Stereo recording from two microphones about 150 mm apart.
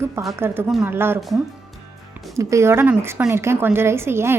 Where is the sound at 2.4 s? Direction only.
20° right (ahead or behind).